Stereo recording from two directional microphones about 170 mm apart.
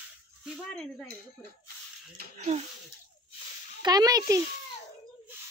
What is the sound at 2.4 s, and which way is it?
Speech, 40° right (ahead or behind).